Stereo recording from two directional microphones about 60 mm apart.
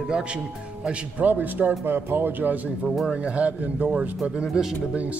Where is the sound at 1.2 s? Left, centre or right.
Right.